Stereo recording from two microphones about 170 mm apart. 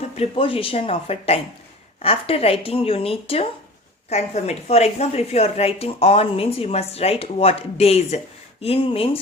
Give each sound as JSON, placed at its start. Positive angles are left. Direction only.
{"t": 0.2, "sound": "a woman's voice", "side_deg": 35}